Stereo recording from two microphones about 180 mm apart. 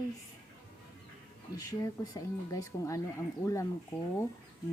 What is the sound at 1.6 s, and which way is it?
Speech, 20° left (ahead or behind).